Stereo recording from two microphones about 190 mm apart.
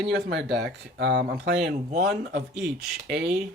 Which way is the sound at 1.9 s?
55° right (ahead or behind).